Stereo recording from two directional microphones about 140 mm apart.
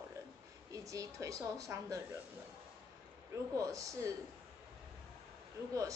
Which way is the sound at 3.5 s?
25° right (ahead or behind).